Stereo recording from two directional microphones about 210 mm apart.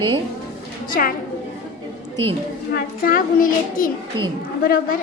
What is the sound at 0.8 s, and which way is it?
Speech, 40° left (ahead or behind).